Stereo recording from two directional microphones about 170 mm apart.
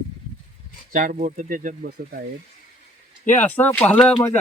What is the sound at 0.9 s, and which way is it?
Speech, 50° right (ahead or behind).